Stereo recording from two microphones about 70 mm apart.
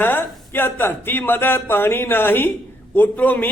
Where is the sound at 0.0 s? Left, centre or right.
Left.